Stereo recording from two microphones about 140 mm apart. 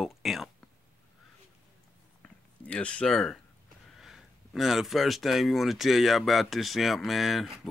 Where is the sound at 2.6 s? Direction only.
10° left (ahead or behind).